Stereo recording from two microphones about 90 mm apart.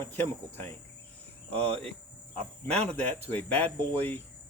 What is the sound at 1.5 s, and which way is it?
Cricket, 90° right.